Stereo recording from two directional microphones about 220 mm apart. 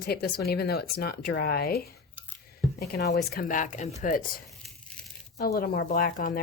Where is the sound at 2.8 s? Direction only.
45° left (ahead or behind).